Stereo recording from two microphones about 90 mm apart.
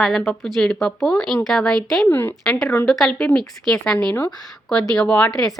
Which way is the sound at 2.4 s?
5° left (ahead or behind).